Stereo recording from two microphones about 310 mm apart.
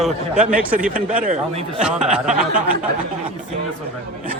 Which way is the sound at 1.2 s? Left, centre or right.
Right.